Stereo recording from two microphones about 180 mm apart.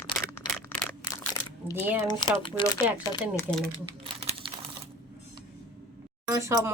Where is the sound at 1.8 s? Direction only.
10° right (ahead or behind).